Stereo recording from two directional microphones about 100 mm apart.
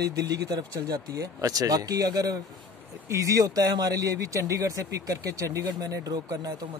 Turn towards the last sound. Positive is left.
turn(degrees=-40)  # may be behind; listen again after turning